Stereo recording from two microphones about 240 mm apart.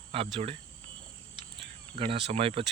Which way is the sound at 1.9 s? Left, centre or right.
Right.